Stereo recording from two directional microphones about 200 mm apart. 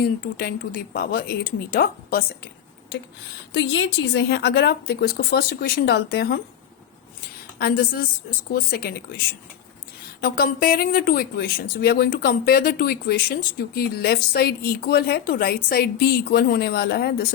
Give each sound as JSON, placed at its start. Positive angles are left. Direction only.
{"t": 0.0, "sound": "speech", "side_deg": 50}
{"t": 3.5, "sound": "speech", "side_deg": 60}
{"t": 7.6, "sound": "speech", "side_deg": 50}